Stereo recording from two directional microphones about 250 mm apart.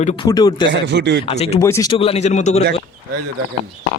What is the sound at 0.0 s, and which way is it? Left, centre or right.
Speech, centre.